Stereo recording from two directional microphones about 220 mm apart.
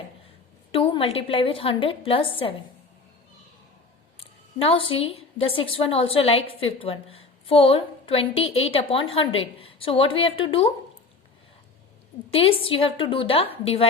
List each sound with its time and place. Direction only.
0.7 s a woman's voice: 25° left (ahead or behind)
4.6 s a woman's voice: 25° left (ahead or behind)
12.3 s a woman's voice: 25° left (ahead or behind)